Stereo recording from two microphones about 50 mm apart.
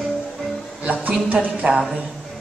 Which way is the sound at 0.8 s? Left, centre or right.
Right.